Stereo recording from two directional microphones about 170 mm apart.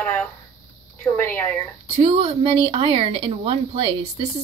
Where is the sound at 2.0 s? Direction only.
35° right (ahead or behind).